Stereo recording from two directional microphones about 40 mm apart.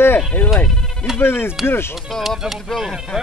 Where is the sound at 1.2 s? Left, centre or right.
Left.